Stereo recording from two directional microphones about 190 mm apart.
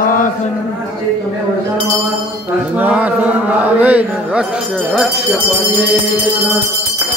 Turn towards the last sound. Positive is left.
turn(degrees=0)  # may be behind; listen again after turning